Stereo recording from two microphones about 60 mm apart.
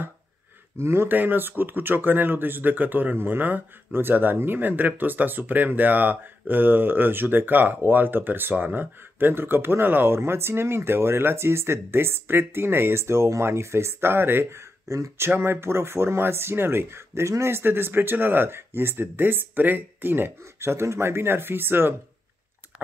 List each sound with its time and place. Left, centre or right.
0.7 s speech: right
1.1 s speech: right